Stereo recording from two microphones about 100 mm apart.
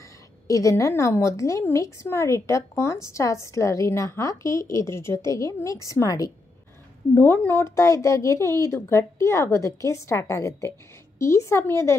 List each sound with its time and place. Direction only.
0.5 s a woman's voice: 30° left (ahead or behind)
7.2 s speech: 25° left (ahead or behind)